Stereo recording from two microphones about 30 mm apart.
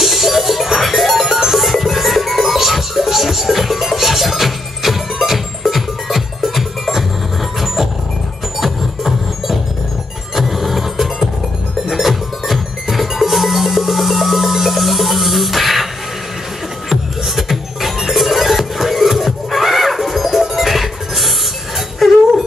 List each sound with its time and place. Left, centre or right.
0.0 s music: centre
8.5 s music: centre
16.9 s music: centre
22.0 s a sound: centre